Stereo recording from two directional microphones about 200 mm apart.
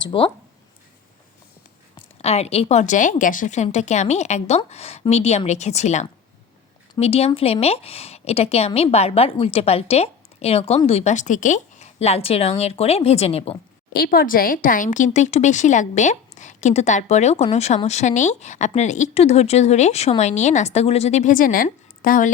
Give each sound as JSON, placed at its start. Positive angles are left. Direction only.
{"t": 0.0, "sound": "speech", "side_deg": 25}
{"t": 2.0, "sound": "a woman's voice", "side_deg": 30}
{"t": 13.9, "sound": "a woman's voice", "side_deg": 50}